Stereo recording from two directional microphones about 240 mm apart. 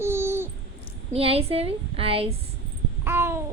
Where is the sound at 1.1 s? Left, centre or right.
Right.